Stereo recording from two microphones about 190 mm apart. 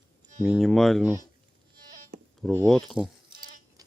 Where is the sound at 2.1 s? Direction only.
50° right (ahead or behind).